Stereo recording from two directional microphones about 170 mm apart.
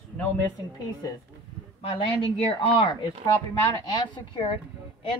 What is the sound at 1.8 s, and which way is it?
Speech, 30° left (ahead or behind).